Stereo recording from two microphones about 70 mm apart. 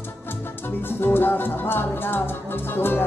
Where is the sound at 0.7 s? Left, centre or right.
Left.